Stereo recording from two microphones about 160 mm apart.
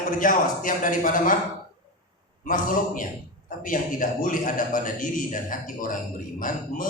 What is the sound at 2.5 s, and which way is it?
A man's voice, 60° left (ahead or behind).